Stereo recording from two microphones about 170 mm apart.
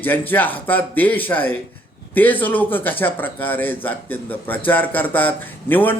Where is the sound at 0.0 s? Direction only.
10° left (ahead or behind).